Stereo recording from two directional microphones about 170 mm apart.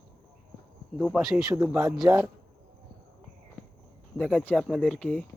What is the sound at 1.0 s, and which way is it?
Speech, centre (ahead or behind).